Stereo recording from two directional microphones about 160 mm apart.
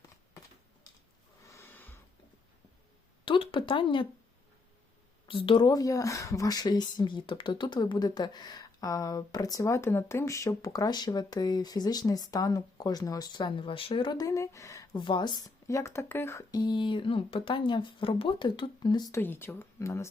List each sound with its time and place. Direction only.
1.5 s snort: 15° left (ahead or behind)
3.2 s a sound: 30° left (ahead or behind)
5.3 s speech: 30° left (ahead or behind)
19.2 s speech: 15° left (ahead or behind)